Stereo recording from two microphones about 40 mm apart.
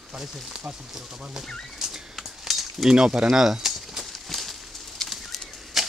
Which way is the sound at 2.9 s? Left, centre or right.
Centre.